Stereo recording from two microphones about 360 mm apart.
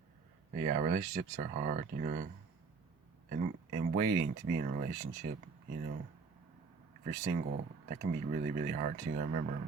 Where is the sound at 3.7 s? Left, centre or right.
Centre.